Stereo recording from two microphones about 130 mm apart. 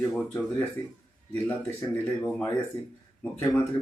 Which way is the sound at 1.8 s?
15° left (ahead or behind).